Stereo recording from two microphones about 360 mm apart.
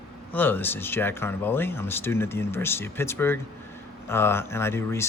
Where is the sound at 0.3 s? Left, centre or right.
Centre.